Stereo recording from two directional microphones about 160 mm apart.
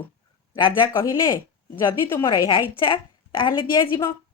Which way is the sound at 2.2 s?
30° left (ahead or behind).